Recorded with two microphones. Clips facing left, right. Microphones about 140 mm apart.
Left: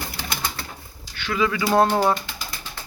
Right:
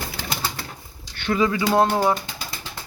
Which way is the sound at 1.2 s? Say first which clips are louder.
Right 2 dB; 35° right (ahead or behind).